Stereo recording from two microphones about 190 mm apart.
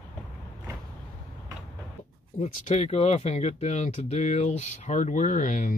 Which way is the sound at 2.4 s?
35° left (ahead or behind).